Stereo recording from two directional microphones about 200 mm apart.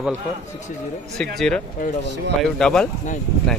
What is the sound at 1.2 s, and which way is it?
A man's voice, 5° left (ahead or behind).